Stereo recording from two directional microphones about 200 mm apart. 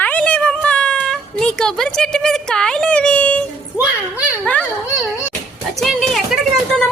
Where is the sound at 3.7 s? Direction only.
5° right (ahead or behind).